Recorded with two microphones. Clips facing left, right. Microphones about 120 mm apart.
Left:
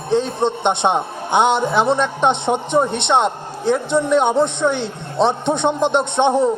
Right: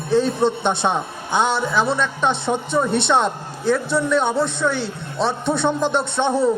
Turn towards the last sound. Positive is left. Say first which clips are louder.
# left 4 dB
turn(degrees=20)  # may be behind; listen again after turning